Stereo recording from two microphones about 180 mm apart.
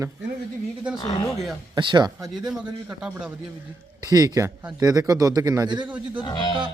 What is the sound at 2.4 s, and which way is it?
Speech, 5° right (ahead or behind).